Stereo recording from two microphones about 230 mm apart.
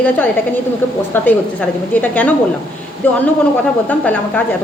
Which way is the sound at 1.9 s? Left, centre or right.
Centre.